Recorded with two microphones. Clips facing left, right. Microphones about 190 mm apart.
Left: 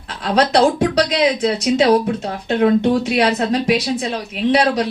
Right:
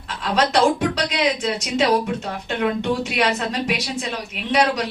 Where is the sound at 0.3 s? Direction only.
40° left (ahead or behind).